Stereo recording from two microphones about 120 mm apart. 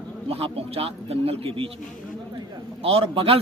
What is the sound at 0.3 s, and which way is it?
A man's voice, 55° right (ahead or behind).